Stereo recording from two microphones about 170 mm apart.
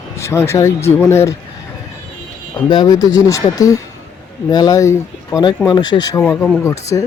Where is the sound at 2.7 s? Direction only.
25° left (ahead or behind).